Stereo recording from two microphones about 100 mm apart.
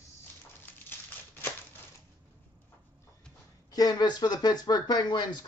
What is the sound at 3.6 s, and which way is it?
Speech, 40° left (ahead or behind).